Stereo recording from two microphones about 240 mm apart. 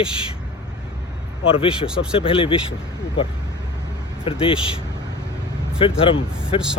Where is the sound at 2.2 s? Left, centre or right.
Left.